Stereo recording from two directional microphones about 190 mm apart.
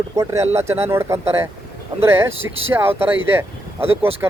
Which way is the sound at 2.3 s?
90° right.